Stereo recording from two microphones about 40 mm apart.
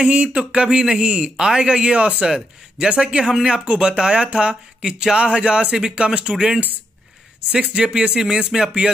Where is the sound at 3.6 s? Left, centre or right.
Right.